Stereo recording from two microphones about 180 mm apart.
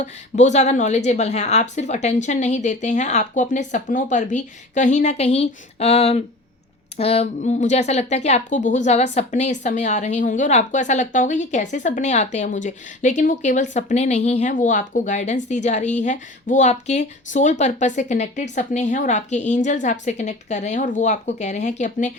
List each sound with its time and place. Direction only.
0.0 s a woman's voice: 40° left (ahead or behind)